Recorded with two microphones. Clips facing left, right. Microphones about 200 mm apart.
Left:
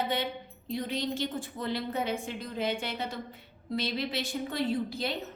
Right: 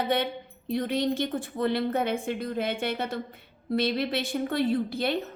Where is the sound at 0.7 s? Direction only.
60° right (ahead or behind).